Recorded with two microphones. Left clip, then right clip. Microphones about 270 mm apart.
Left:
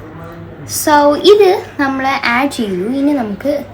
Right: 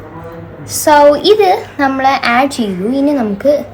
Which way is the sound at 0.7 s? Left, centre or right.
Right.